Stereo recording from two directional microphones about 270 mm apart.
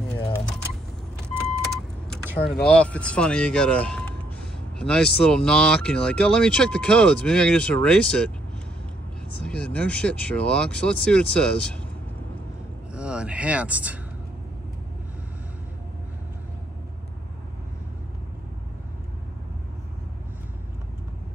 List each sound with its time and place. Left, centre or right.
2.3 s speech: left
2.6 s speech: centre
9.4 s speech: centre
12.9 s speech: centre